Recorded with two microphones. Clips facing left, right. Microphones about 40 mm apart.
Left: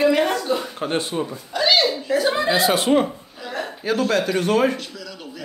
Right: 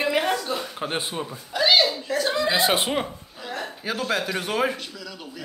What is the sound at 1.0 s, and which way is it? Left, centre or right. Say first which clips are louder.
Chuckle: left 5 dB; centre.